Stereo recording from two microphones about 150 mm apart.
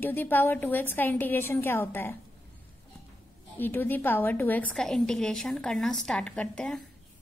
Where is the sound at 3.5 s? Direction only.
15° left (ahead or behind).